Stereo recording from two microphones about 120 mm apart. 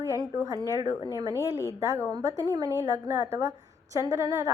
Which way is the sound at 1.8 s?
25° right (ahead or behind).